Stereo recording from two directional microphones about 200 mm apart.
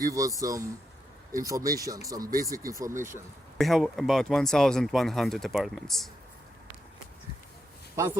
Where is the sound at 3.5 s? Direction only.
Centre (ahead or behind).